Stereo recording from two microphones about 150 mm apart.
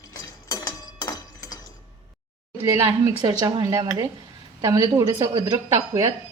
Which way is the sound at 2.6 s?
20° right (ahead or behind).